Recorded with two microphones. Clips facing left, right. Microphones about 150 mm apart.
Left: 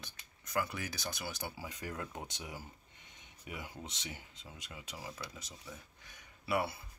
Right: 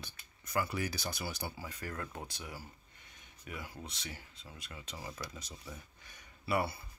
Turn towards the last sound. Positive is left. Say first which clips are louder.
# right 1 dB
turn(degrees=0)  # may be behind; listen again after turning